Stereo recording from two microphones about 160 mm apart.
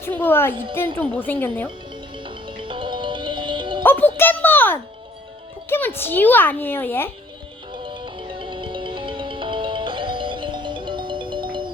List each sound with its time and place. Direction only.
0.0 s a child's voice: 15° left (ahead or behind)
2.2 s music: 30° right (ahead or behind)
3.8 s a child's voice: 10° left (ahead or behind)
4.2 s a sound: 10° left (ahead or behind)
5.6 s a child's voice: 15° left (ahead or behind)
7.7 s music: 30° right (ahead or behind)